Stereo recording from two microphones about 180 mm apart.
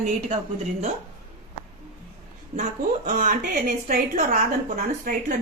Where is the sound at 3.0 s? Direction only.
45° right (ahead or behind).